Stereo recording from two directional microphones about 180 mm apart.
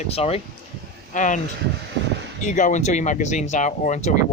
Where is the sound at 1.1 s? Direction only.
45° left (ahead or behind).